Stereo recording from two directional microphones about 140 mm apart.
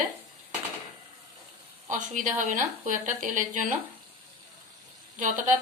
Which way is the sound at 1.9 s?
65° right (ahead or behind).